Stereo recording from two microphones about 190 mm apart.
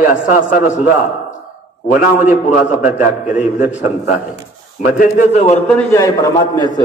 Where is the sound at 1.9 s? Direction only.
40° left (ahead or behind).